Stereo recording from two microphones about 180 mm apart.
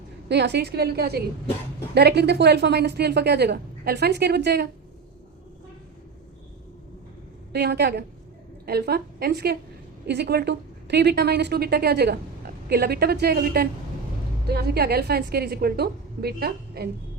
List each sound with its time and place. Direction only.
0.3 s a woman's voice: 70° right (ahead or behind)
7.5 s a woman's voice: 65° right (ahead or behind)